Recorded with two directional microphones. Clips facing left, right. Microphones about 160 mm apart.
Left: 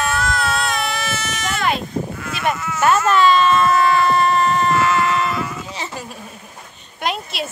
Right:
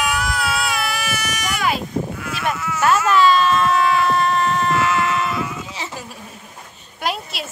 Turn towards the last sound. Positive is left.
turn(degrees=0)  # may be behind; listen again after turning